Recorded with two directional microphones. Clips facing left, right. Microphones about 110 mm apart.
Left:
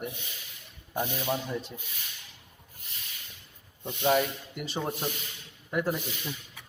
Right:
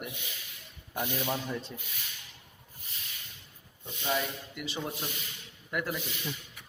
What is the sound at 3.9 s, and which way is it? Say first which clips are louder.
Rub: left 7 dB; 50° left (ahead or behind).